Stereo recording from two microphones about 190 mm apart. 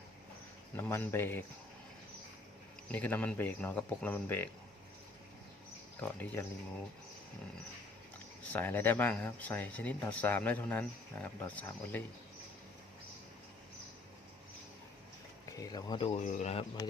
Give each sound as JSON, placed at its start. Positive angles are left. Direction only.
{"t": 0.8, "sound": "speech", "side_deg": 10}
{"t": 2.9, "sound": "speech", "side_deg": 10}
{"t": 6.0, "sound": "speech", "side_deg": 10}
{"t": 8.5, "sound": "speech", "side_deg": 10}
{"t": 15.5, "sound": "speech", "side_deg": 20}